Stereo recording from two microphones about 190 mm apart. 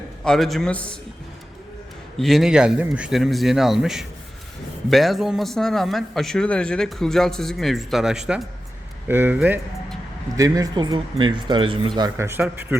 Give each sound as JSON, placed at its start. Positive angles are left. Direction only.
{"t": 0.3, "sound": "a man's voice", "side_deg": 0}
{"t": 2.1, "sound": "a man's voice", "side_deg": 0}